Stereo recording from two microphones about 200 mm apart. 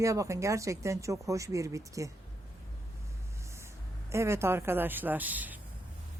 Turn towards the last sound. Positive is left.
turn(degrees=-10)  # may be behind; listen again after turning